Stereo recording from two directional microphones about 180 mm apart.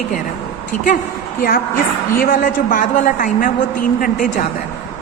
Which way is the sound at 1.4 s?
55° left (ahead or behind).